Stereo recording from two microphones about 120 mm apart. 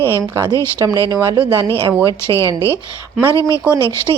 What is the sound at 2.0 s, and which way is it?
A woman's voice, 25° left (ahead or behind).